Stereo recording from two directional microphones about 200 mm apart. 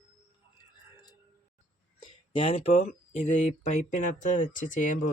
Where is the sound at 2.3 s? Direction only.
25° left (ahead or behind).